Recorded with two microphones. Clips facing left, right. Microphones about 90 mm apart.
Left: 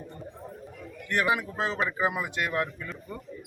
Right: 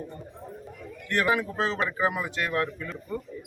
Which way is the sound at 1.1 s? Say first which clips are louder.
Right 1 dB; 15° left (ahead or behind).